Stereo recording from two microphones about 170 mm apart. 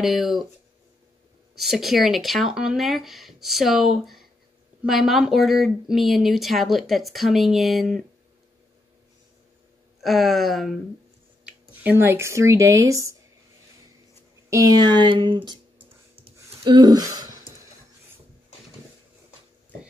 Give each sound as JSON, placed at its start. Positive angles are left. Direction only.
{"t": 0.0, "sound": "speech", "side_deg": 0}
{"t": 1.6, "sound": "speech", "side_deg": 0}
{"t": 9.9, "sound": "speech", "side_deg": 0}
{"t": 14.5, "sound": "speech", "side_deg": -20}
{"t": 16.6, "sound": "speech", "side_deg": -25}